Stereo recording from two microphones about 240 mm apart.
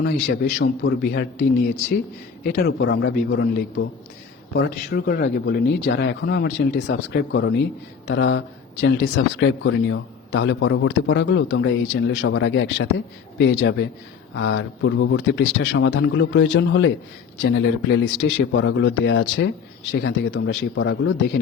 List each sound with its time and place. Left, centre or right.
0.0 s speech: left